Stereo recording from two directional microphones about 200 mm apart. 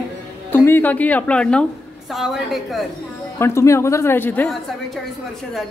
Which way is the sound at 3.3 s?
15° left (ahead or behind).